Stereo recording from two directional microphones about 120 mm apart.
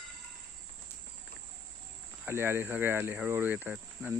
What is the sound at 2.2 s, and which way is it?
Speech, 20° right (ahead or behind).